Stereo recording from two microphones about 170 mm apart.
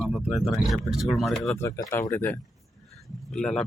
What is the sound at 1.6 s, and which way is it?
Speech, 15° left (ahead or behind).